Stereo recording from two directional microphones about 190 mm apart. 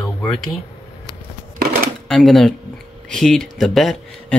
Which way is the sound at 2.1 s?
Centre (ahead or behind).